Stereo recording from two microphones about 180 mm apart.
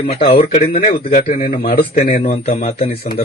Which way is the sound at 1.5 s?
55° left (ahead or behind).